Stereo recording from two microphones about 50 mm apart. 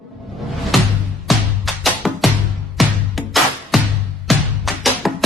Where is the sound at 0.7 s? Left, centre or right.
Centre.